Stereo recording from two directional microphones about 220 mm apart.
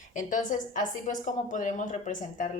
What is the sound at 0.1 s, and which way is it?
Speech, 35° left (ahead or behind).